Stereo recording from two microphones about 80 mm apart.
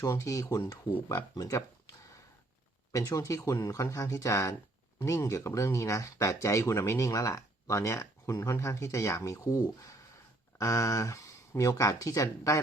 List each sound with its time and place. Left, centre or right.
0.0 s speech: left
2.9 s speech: left
10.6 s speech: left